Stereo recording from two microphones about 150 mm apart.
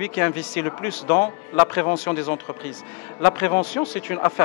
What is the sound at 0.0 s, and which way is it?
Speech, 15° left (ahead or behind).